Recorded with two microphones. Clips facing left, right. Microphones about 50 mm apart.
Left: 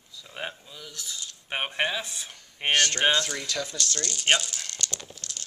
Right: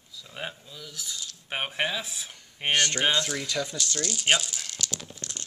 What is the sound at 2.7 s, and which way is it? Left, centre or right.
Speech, centre.